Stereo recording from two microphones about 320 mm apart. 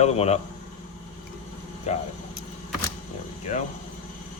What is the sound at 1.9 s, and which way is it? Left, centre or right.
Speech, left.